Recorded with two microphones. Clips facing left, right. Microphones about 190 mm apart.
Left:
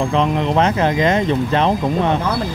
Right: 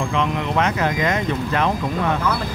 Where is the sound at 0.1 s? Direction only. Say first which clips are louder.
Left 5 dB; 30° left (ahead or behind).